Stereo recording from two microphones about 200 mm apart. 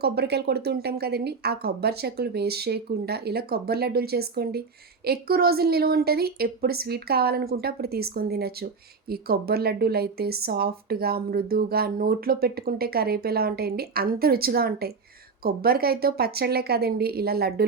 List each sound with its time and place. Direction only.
0.0 s a woman's voice: 55° right (ahead or behind)